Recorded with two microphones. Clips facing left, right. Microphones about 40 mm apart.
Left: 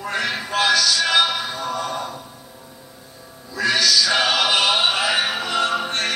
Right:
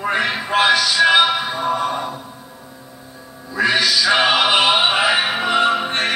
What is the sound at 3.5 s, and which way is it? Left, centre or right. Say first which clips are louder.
Music: right 2 dB; right.